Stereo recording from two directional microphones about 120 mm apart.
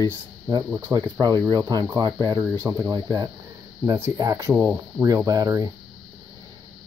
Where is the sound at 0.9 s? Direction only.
20° right (ahead or behind).